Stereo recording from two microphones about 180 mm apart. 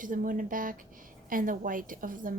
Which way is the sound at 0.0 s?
45° right (ahead or behind).